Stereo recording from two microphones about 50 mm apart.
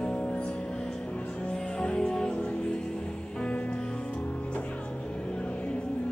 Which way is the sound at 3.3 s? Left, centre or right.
Left.